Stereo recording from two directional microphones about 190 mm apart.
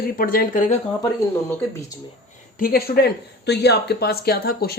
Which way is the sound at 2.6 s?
50° left (ahead or behind).